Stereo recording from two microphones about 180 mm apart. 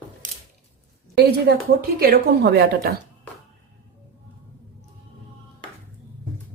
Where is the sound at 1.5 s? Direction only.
65° right (ahead or behind).